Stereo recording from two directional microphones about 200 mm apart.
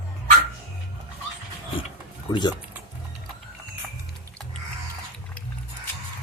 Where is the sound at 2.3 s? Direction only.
20° left (ahead or behind).